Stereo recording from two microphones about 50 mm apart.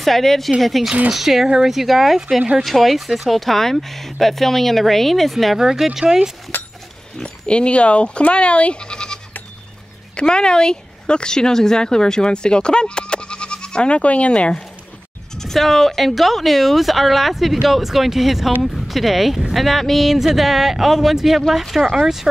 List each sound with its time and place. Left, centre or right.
0.0 s speech: centre
5.6 s speech: centre
6.5 s a sound: left
7.2 s speech: left
15.3 s speech: centre